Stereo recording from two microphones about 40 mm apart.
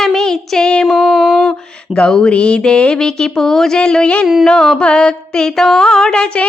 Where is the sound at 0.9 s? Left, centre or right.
Centre.